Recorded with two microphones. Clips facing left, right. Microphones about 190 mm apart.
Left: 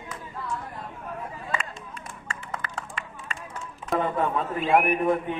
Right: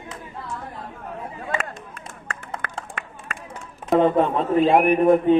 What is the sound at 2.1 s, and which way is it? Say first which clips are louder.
Run: right 2 dB; 50° right (ahead or behind).